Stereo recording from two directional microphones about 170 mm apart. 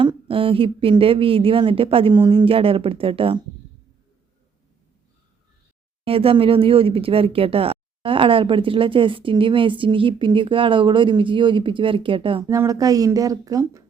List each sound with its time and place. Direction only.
0.0 s speech: 30° right (ahead or behind)
6.1 s speech: 35° right (ahead or behind)
12.5 s speech: 20° right (ahead or behind)